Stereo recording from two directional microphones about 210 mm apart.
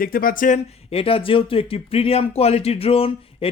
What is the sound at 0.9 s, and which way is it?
Speech, 25° left (ahead or behind).